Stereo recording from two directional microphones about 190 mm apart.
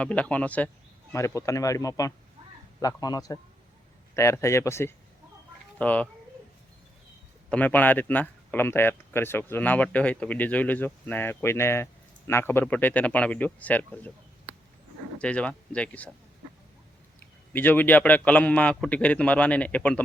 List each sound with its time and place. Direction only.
0.0 s a man's voice: 5° left (ahead or behind)
7.5 s speech: 10° left (ahead or behind)
15.2 s speech: 5° left (ahead or behind)
17.5 s speech: 10° left (ahead or behind)